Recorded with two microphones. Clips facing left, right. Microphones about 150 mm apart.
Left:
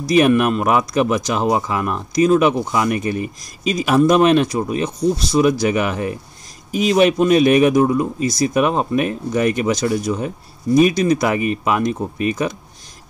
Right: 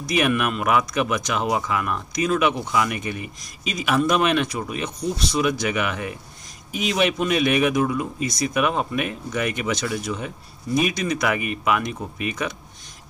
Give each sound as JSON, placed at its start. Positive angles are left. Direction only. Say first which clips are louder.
{"t": 0.0, "sound": "speech", "louder": "left 8 dB", "side_deg": 35}